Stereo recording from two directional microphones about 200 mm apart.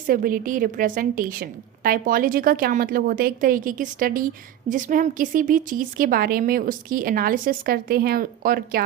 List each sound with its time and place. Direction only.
0.1 s a woman's voice: 45° right (ahead or behind)